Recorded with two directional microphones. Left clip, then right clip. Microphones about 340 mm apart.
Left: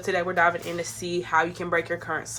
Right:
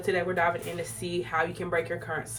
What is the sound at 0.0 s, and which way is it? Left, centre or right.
Speech, centre.